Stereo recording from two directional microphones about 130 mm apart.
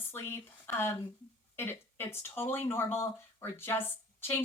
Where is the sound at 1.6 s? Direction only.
20° left (ahead or behind).